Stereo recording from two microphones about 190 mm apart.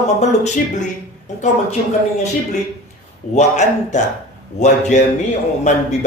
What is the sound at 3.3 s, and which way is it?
Speech, 40° left (ahead or behind).